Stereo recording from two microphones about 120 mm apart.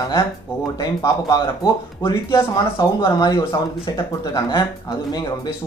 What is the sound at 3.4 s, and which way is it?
Speech, 25° left (ahead or behind).